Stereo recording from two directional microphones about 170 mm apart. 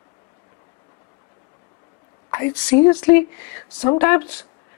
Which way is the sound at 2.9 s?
15° left (ahead or behind).